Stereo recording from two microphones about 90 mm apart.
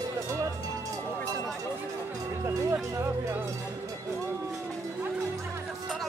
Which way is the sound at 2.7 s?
30° right (ahead or behind).